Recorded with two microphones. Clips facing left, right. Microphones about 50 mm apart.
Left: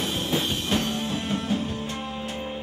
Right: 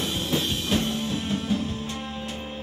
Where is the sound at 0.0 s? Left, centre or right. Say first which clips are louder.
Even; centre.